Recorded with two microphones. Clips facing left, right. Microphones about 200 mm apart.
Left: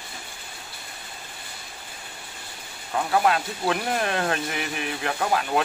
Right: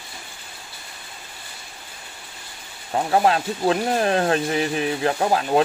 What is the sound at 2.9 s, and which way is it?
Speech, 30° right (ahead or behind).